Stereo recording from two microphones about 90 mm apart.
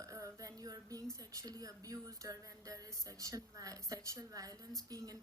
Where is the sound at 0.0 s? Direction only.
35° right (ahead or behind).